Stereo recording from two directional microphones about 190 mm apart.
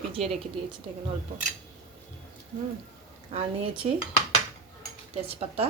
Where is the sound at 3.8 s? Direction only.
35° right (ahead or behind).